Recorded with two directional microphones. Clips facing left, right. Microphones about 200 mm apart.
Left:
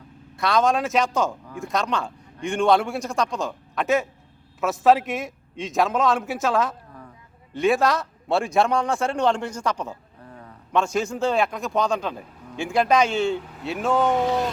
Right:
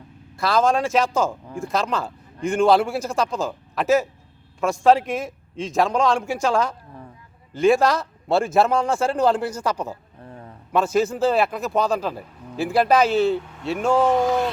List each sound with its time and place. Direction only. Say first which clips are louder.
0.3 s a man's voice: right 1 dB; centre (ahead or behind)
9.9 s a sound: right 3 dB; 30° right (ahead or behind)
10.7 s a man's voice: right 3 dB; 5° right (ahead or behind)